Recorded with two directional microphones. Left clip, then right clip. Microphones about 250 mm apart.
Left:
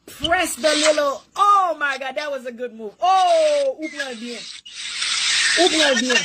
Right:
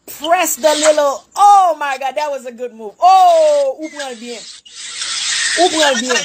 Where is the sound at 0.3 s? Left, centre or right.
Centre.